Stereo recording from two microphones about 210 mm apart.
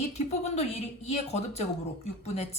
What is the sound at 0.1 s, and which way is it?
A woman's voice, 30° left (ahead or behind).